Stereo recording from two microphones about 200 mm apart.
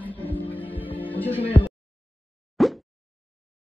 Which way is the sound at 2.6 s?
Centre (ahead or behind).